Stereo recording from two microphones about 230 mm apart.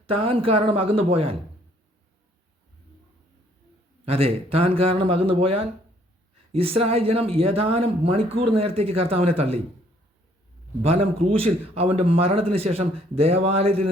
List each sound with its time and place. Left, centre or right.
0.0 s speech: right
4.0 s speech: right
11.2 s speech: right